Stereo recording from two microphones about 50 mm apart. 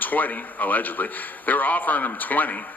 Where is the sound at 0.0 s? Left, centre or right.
Left.